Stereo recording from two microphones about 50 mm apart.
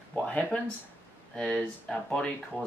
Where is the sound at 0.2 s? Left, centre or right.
Left.